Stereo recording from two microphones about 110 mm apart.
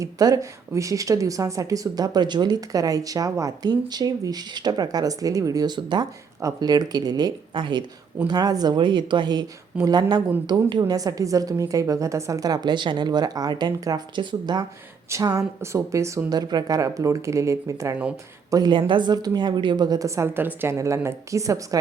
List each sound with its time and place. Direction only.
0.0 s speech: 30° right (ahead or behind)
15.1 s a woman's voice: 30° right (ahead or behind)